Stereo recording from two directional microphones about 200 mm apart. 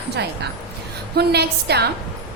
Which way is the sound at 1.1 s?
55° right (ahead or behind).